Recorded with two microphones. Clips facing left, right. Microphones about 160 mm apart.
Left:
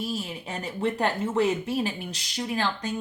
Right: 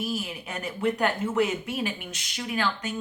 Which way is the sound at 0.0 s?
30° left (ahead or behind).